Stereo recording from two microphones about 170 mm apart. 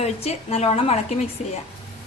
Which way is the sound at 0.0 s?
40° left (ahead or behind).